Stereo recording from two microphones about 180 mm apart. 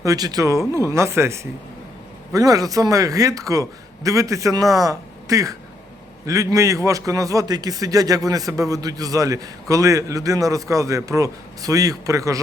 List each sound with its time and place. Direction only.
0.0 s a man's voice: 20° right (ahead or behind)